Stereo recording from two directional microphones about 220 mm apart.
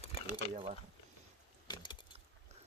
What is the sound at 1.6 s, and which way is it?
Keys jangling, 20° left (ahead or behind).